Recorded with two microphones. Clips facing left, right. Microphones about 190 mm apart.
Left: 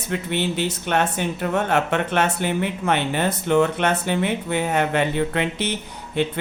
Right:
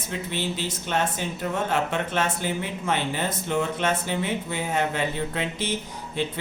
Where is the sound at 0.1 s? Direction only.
65° left (ahead or behind).